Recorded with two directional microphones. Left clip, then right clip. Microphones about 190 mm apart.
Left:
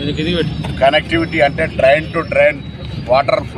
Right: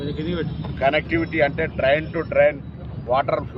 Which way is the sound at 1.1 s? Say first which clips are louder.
Left 6 dB; 15° right (ahead or behind).